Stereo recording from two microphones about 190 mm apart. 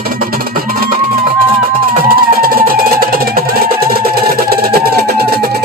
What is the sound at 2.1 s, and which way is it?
Music, 50° right (ahead or behind).